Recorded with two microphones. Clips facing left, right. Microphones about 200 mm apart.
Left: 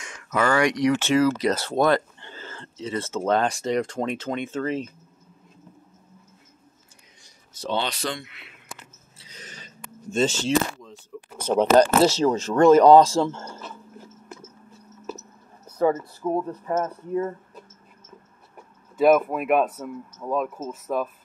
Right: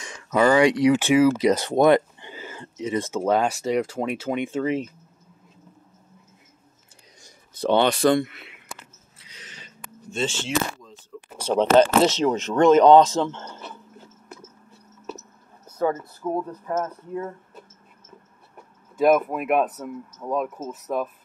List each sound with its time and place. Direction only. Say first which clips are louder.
0.3 s speech: right 4 dB; 20° right (ahead or behind)
7.6 s speech: right 9 dB; 55° right (ahead or behind)
9.2 s a sound: left 3 dB; 45° left (ahead or behind)
10.1 s speech: left 5 dB; 40° left (ahead or behind)
11.1 s a sound: left 1 dB; 10° left (ahead or behind)
11.5 s speech: even; 15° left (ahead or behind)
12.1 s speech: left 1 dB; 20° right (ahead or behind)
12.8 s speech: even; centre (ahead or behind)
16.2 s speech: left 2 dB; 10° left (ahead or behind)
18.9 s speech: left 1 dB; centre (ahead or behind)